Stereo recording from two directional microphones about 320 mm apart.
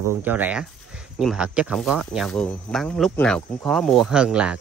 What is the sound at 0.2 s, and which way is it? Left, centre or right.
Speech, centre.